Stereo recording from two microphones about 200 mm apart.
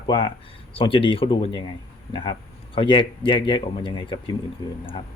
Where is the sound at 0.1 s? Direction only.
25° left (ahead or behind).